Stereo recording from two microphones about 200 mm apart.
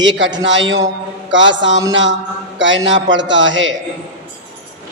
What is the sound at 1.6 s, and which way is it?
A man's voice, 70° right (ahead or behind).